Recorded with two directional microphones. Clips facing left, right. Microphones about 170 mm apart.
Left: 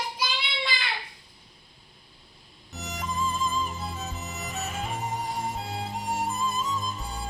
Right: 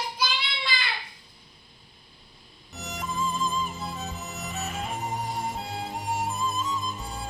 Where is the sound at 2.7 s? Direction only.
Centre (ahead or behind).